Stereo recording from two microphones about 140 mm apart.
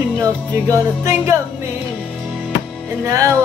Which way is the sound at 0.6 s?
20° right (ahead or behind).